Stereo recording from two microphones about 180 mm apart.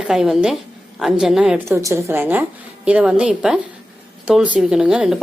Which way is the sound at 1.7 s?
15° right (ahead or behind).